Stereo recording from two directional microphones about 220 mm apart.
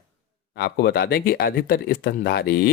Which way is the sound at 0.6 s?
50° left (ahead or behind).